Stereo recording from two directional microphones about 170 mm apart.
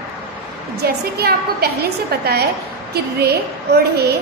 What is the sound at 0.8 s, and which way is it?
A woman's voice, 65° right (ahead or behind).